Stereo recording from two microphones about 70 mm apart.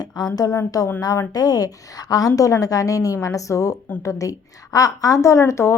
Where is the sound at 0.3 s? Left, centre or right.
Left.